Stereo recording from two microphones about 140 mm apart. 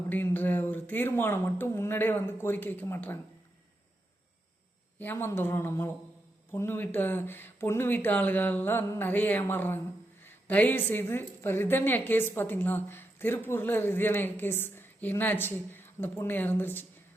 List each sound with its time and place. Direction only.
0.1 s a woman's voice: 15° left (ahead or behind)
4.9 s a woman's voice: 15° left (ahead or behind)